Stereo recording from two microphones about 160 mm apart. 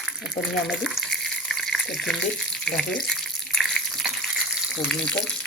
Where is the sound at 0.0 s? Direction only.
Centre (ahead or behind).